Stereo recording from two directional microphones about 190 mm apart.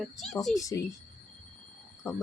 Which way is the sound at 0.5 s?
15° left (ahead or behind).